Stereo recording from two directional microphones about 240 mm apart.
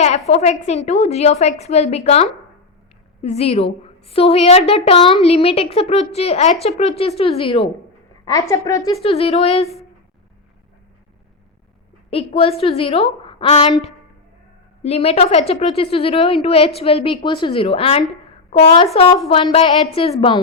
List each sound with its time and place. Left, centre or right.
0.3 s a woman's voice: left
9.0 s a woman's voice: left
12.1 s a woman's voice: left
14.8 s a woman's voice: left